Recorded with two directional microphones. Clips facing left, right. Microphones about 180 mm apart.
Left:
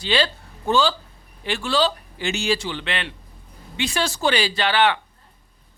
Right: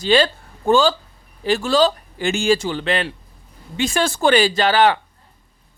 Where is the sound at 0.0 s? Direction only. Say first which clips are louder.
Right 6 dB; 45° right (ahead or behind).